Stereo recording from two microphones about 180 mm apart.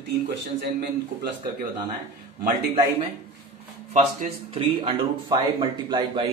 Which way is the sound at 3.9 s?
35° right (ahead or behind).